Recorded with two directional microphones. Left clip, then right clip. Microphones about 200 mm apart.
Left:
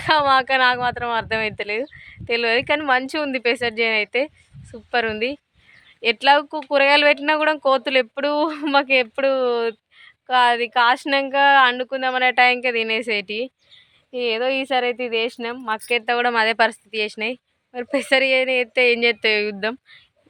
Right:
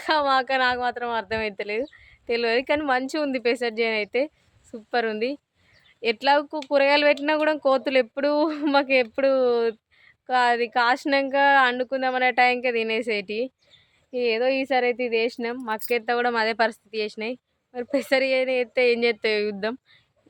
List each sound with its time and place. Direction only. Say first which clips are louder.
0.0 s speech: left 5 dB; 5° left (ahead or behind)